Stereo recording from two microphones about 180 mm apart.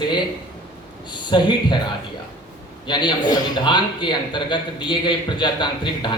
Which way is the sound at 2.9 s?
25° left (ahead or behind).